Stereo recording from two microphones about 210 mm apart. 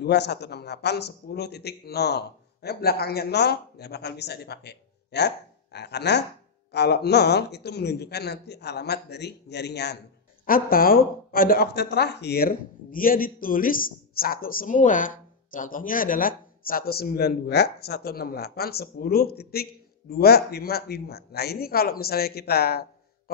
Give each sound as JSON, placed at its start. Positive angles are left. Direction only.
{"t": 0.0, "sound": "speech", "side_deg": 50}